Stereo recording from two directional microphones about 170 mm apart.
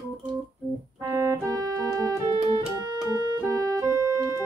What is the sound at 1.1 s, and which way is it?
Organ, 15° right (ahead or behind).